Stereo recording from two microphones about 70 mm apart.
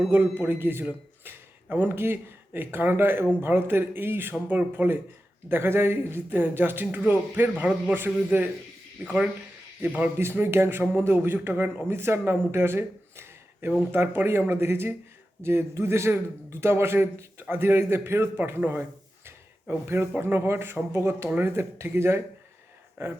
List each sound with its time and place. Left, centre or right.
0.1 s a man's voice: right
9.0 s speech: centre
10.2 s a man's voice: right